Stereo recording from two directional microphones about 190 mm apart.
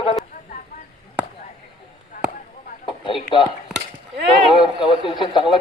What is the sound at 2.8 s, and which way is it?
Speech, 25° left (ahead or behind).